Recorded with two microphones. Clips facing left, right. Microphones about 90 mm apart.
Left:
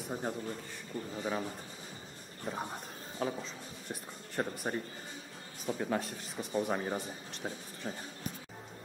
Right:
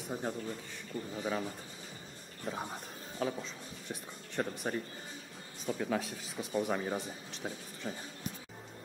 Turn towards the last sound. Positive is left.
turn(degrees=0)  # may be behind; listen again after turning